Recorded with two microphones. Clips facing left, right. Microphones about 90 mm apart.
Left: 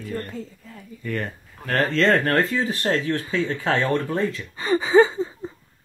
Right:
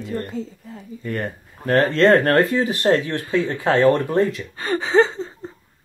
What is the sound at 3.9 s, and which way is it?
Speech, 65° right (ahead or behind).